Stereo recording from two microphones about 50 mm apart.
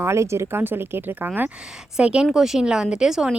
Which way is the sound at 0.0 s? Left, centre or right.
Right.